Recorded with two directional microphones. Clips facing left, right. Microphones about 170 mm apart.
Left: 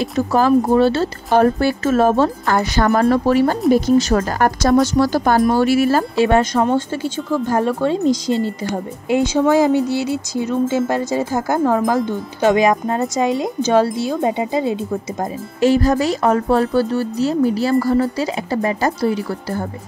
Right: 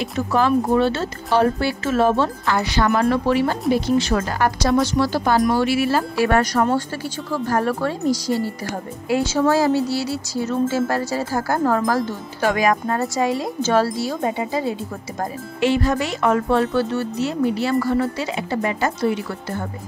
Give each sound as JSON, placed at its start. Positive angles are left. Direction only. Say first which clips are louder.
{"t": 0.3, "sound": "speech", "louder": "left 3 dB", "side_deg": 40}
{"t": 6.1, "sound": "speech", "louder": "left 2 dB", "side_deg": 25}
{"t": 15.6, "sound": "speech", "louder": "left 5 dB", "side_deg": 40}